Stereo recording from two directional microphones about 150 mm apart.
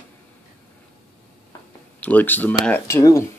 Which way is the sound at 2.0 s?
10° left (ahead or behind).